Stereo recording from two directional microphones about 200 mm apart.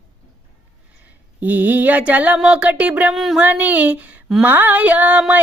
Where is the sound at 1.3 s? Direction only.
10° right (ahead or behind).